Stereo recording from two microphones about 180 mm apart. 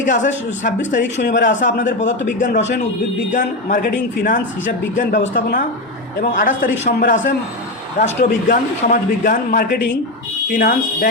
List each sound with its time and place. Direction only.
0.0 s a man's voice: 45° left (ahead or behind)
1.0 s speech: 80° left
1.4 s a man's voice: 45° left (ahead or behind)
2.5 s speech: 80° left
3.3 s a man's voice: 45° left (ahead or behind)